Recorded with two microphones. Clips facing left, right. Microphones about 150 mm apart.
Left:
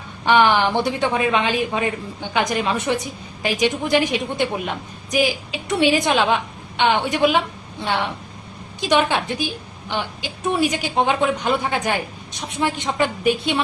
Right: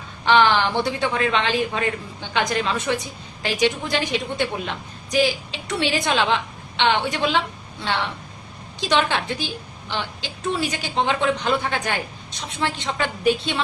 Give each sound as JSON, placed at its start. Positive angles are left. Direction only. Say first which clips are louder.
{"t": 0.3, "sound": "a woman's voice", "louder": "left 1 dB", "side_deg": 15}
{"t": 9.9, "sound": "a woman's voice", "louder": "left 3 dB", "side_deg": 15}